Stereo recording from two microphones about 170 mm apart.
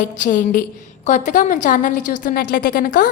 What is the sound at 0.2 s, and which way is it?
A woman's voice, 50° left (ahead or behind).